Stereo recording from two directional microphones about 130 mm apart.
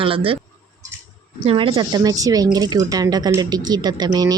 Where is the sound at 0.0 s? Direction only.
45° right (ahead or behind).